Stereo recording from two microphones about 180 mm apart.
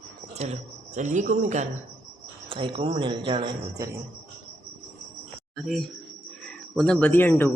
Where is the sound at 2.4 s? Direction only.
30° right (ahead or behind).